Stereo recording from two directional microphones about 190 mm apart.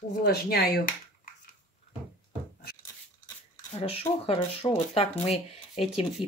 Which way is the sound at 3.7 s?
30° left (ahead or behind).